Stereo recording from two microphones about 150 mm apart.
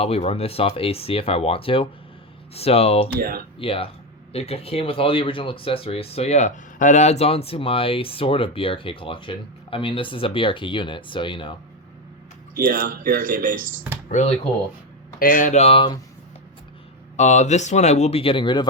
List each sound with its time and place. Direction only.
0.0 s speech: 40° left (ahead or behind)
3.2 s speech: 75° right (ahead or behind)
3.6 s speech: 40° left (ahead or behind)
12.5 s speech: 75° right (ahead or behind)
14.1 s speech: 50° left (ahead or behind)
15.2 s speech: 60° left (ahead or behind); by 16.0 s 35° left (ahead or behind)
17.2 s speech: 50° left (ahead or behind); by 18.7 s 30° left (ahead or behind)